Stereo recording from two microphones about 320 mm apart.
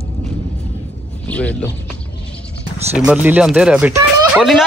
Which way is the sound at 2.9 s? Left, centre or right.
Centre.